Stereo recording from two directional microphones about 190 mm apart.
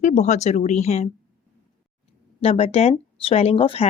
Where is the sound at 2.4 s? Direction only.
30° left (ahead or behind).